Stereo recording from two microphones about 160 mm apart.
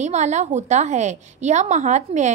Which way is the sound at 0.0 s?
45° right (ahead or behind).